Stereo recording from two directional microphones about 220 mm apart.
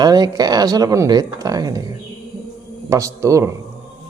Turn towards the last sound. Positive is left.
turn(degrees=-15)  # may be behind; listen again after turning